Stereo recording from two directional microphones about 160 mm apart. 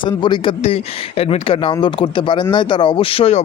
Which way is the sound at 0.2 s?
30° left (ahead or behind).